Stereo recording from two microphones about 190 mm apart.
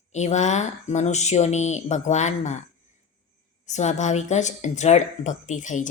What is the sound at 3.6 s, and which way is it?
A woman's voice, 40° left (ahead or behind).